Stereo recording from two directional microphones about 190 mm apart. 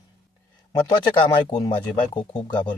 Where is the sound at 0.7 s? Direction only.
20° left (ahead or behind).